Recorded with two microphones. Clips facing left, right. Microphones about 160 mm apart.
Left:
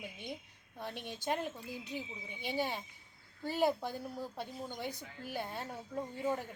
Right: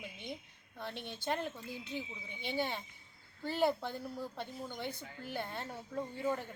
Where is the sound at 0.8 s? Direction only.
10° left (ahead or behind).